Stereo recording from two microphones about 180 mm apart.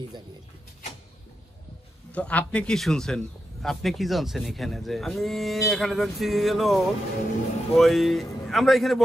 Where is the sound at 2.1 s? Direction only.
5° left (ahead or behind).